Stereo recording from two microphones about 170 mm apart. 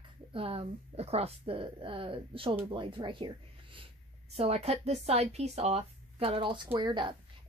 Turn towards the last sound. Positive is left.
turn(degrees=-25)  # may be behind; listen again after turning